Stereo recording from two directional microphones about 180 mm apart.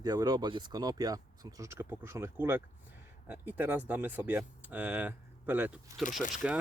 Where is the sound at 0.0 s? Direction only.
20° right (ahead or behind).